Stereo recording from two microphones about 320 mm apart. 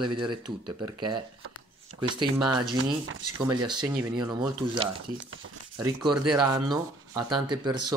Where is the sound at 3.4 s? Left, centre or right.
Centre.